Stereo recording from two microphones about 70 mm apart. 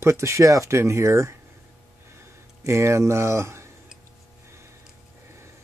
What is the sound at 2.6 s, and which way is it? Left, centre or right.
Speech, right.